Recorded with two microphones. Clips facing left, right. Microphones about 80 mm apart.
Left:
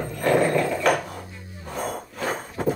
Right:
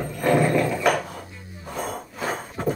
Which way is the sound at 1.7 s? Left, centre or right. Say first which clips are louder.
Left 1 dB; centre.